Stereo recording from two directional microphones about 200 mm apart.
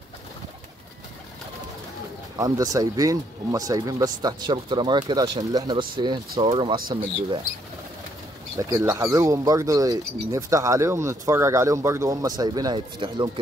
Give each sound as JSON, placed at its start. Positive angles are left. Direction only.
{"t": 2.3, "sound": "speech", "side_deg": -15}
{"t": 8.5, "sound": "speech", "side_deg": -15}